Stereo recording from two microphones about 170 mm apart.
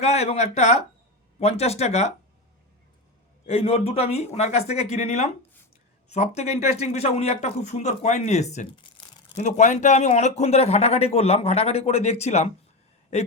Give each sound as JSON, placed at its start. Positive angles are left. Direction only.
{"t": 0.0, "sound": "speech", "side_deg": 40}
{"t": 3.4, "sound": "speech", "side_deg": 35}